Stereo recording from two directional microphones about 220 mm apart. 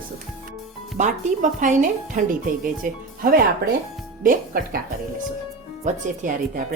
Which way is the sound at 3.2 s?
40° right (ahead or behind).